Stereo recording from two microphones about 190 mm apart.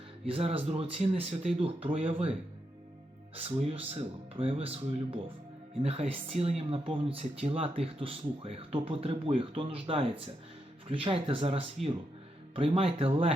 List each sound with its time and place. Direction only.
0.3 s speech: 30° right (ahead or behind)
3.3 s speech: 30° right (ahead or behind)